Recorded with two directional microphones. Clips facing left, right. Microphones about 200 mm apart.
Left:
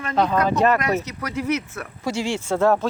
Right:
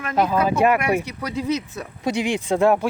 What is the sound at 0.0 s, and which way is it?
Speech, 5° right (ahead or behind).